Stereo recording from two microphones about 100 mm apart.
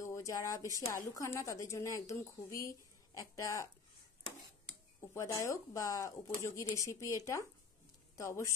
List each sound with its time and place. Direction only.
0.0 s a woman's voice: 30° left (ahead or behind)
5.1 s a woman's voice: 30° left (ahead or behind)